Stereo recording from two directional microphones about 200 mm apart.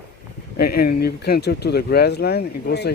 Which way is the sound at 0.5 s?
50° left (ahead or behind).